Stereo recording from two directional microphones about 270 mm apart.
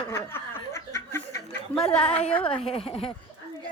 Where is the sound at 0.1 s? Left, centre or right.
Centre.